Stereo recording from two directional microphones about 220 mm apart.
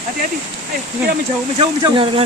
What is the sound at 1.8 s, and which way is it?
Speech, 25° right (ahead or behind).